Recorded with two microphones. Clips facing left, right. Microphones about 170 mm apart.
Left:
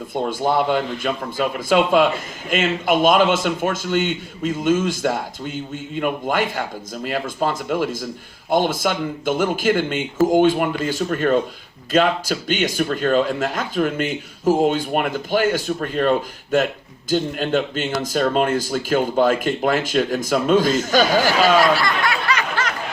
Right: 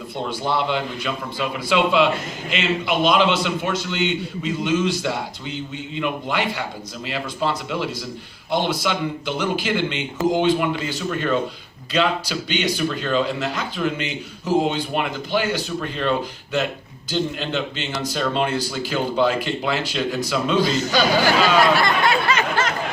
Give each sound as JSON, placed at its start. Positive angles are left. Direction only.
{"t": 0.1, "sound": "a man's voice", "side_deg": 50}
{"t": 21.8, "sound": "snicker", "side_deg": -25}